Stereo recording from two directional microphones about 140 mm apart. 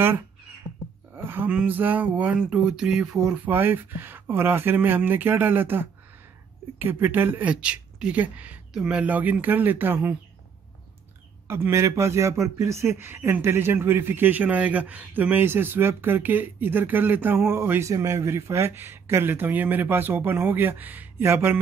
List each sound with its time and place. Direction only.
0.7 s a sound: 35° right (ahead or behind)
1.1 s speech: 15° right (ahead or behind)
3.4 s speech: 15° right (ahead or behind)
11.4 s speech: 20° right (ahead or behind)